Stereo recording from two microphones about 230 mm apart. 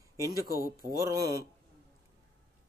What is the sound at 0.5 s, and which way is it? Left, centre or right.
Speech, right.